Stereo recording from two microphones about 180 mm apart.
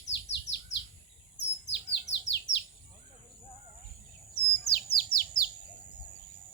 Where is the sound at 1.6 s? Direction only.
75° left (ahead or behind).